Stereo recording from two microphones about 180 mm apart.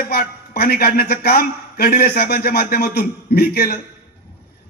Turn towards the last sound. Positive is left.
turn(degrees=60)  # may be behind; listen again after turning